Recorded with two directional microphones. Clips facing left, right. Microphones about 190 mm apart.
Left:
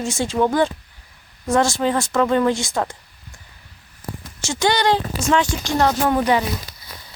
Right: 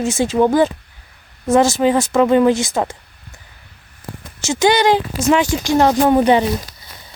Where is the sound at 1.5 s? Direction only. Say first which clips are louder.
Right 5 dB; 5° right (ahead or behind).